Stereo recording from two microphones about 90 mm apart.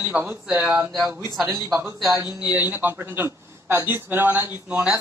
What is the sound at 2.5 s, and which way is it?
A man's voice, 20° right (ahead or behind).